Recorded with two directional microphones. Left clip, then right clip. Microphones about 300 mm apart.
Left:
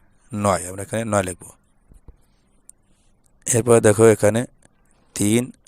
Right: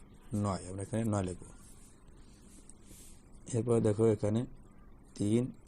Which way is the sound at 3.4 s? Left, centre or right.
Left.